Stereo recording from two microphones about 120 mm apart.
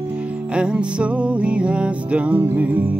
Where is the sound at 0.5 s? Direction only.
10° right (ahead or behind).